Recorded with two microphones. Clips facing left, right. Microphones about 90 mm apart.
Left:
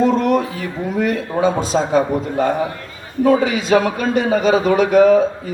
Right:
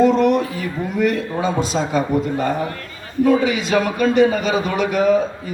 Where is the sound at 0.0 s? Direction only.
40° left (ahead or behind).